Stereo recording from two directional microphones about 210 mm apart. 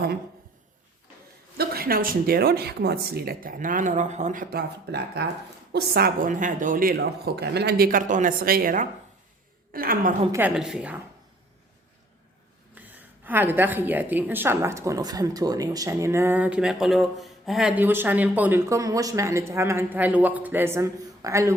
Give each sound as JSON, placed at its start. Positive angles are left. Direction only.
{"t": 1.5, "sound": "speech", "side_deg": -45}
{"t": 10.3, "sound": "a woman's voice", "side_deg": -5}
{"t": 12.7, "sound": "a woman's voice", "side_deg": -10}